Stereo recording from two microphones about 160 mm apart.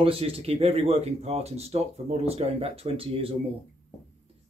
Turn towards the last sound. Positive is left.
turn(degrees=-35)  # may be behind; listen again after turning